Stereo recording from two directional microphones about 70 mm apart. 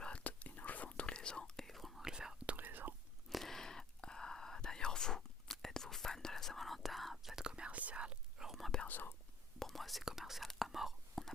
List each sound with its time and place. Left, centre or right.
0.0 s whispering: centre
2.5 s whispering: right
3.2 s whispering: centre
8.9 s whispering: left
9.6 s whispering: centre